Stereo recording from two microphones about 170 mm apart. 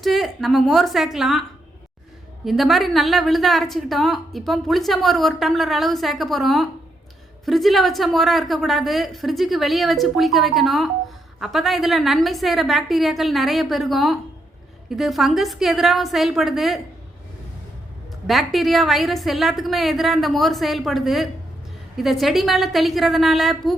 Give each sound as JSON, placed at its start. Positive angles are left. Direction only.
{"t": 0.0, "sound": "a woman's voice", "side_deg": 0}
{"t": 18.3, "sound": "a woman's voice", "side_deg": 0}